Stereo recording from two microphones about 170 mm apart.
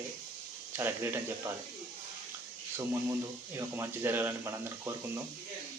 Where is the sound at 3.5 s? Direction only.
15° right (ahead or behind).